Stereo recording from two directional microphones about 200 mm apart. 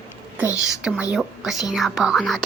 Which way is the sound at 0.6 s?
5° right (ahead or behind).